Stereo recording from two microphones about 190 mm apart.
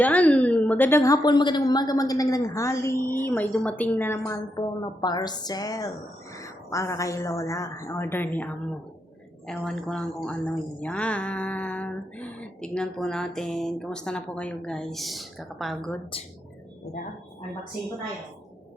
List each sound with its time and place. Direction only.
0.0 s a woman's voice: 5° left (ahead or behind)